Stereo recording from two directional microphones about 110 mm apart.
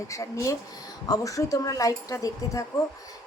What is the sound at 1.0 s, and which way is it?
A woman's voice, 30° left (ahead or behind).